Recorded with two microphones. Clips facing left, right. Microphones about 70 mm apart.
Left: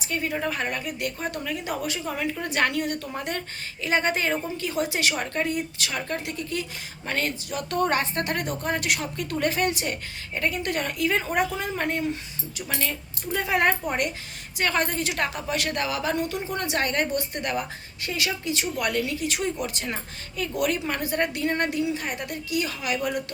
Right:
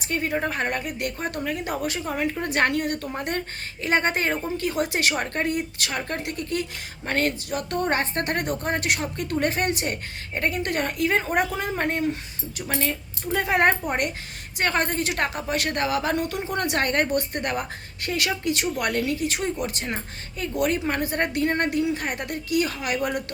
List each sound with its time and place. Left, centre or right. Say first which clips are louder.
0.0 s a woman's voice: right 2 dB; right
7.7 s a woman's voice: left 1 dB; right